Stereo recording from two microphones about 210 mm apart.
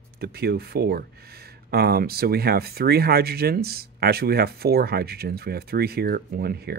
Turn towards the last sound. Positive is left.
turn(degrees=-50)  # may be behind; listen again after turning